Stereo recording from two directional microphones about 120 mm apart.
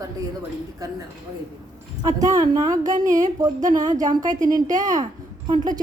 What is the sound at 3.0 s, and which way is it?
Speech, 90° right.